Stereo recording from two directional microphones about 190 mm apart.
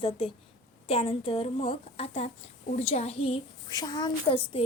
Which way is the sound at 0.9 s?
30° left (ahead or behind).